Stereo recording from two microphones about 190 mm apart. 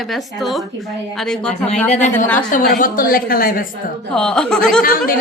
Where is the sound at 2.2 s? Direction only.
10° left (ahead or behind).